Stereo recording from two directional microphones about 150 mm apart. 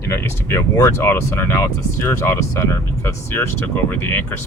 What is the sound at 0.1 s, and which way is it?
Speech, 15° left (ahead or behind).